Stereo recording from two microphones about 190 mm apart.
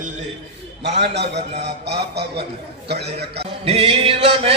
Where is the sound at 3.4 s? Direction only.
30° right (ahead or behind).